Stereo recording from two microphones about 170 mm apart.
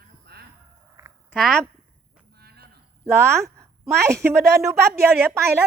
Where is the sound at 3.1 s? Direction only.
15° right (ahead or behind).